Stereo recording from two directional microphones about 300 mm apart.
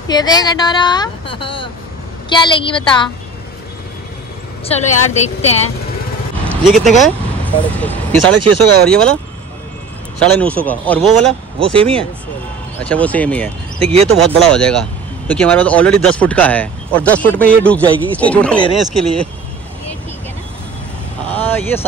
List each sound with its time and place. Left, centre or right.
0.1 s speech: centre
5.1 s speech: left
6.4 s vehicle: centre
6.8 s speech: centre
8.2 s speech: right
8.8 s speech: centre
11.6 s speech: centre
12.8 s speech: centre
21.3 s vehicle: centre